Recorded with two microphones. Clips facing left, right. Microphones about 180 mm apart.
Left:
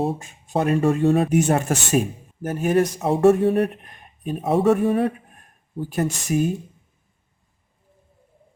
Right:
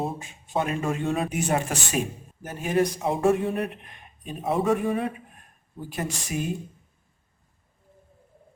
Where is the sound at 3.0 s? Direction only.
70° left (ahead or behind).